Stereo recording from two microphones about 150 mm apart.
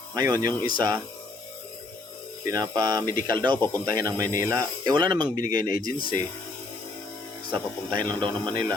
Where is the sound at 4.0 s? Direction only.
25° right (ahead or behind).